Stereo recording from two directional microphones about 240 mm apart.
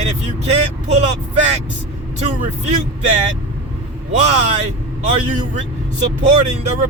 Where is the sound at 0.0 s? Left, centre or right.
Right.